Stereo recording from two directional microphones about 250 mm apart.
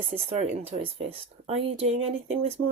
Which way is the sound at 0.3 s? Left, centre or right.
Right.